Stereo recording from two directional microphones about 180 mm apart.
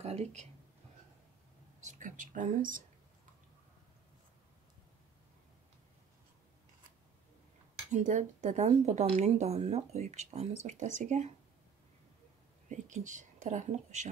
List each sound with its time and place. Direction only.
0.0 s speech: 35° right (ahead or behind)
1.8 s speech: 45° right (ahead or behind)
7.9 s speech: 45° right (ahead or behind)
12.6 s speech: 45° right (ahead or behind)